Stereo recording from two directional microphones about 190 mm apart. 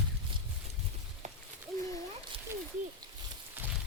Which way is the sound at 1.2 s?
40° right (ahead or behind).